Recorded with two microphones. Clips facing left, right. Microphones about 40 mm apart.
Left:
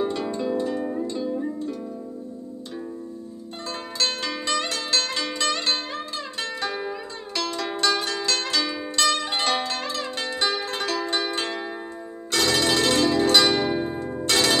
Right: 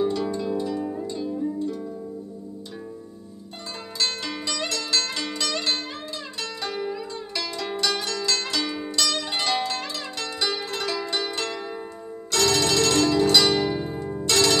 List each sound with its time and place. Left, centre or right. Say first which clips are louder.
0.1 s zither: even; left
4.0 s zither: left 1 dB; left
12.3 s telephone bell ringing: even; left
14.2 s church bell: right 1 dB; left